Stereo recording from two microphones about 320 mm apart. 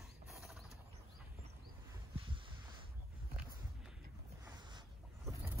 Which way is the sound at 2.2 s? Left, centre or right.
Centre.